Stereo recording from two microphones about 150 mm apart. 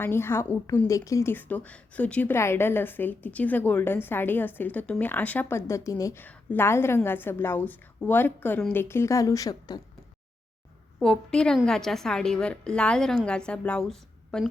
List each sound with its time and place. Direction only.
0.0 s a woman's voice: 15° left (ahead or behind)
11.0 s a woman's voice: 5° left (ahead or behind)